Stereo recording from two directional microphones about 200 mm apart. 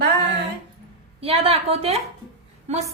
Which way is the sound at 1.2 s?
30° right (ahead or behind).